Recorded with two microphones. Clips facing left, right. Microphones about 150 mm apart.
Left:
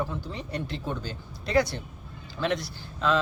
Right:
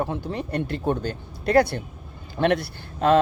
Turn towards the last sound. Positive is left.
turn(degrees=-55)  # may be behind; listen again after turning